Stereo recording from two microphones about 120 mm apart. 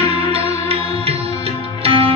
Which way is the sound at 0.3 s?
55° right (ahead or behind).